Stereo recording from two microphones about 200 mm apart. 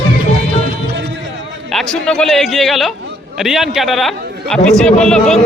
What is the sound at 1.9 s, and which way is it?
A man's voice, 5° left (ahead or behind).